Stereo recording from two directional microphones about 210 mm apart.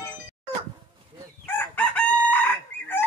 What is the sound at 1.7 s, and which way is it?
Chicken, 5° left (ahead or behind).